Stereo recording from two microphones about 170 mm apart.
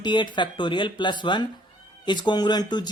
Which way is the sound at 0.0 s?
25° left (ahead or behind).